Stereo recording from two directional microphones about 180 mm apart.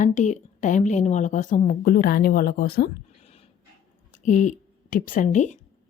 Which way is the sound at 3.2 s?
35° left (ahead or behind).